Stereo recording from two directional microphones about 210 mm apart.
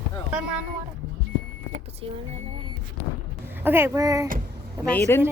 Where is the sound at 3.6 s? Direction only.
10° right (ahead or behind).